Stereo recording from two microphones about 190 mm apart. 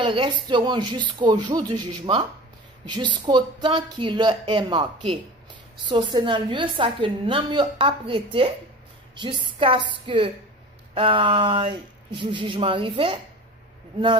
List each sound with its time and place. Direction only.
0.0 s a woman's voice: 25° right (ahead or behind)